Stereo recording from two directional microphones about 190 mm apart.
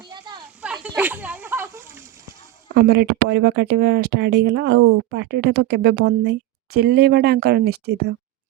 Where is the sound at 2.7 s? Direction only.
60° right (ahead or behind).